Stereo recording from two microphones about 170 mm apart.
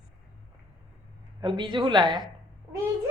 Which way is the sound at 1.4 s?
30° right (ahead or behind).